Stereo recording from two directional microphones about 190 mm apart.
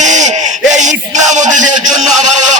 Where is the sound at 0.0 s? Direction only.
40° right (ahead or behind).